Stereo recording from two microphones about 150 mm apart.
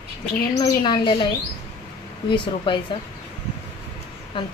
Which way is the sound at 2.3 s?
35° left (ahead or behind).